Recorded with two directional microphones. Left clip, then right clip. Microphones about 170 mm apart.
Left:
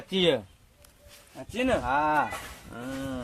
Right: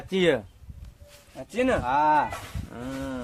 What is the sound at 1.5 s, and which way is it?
Speech, 15° right (ahead or behind).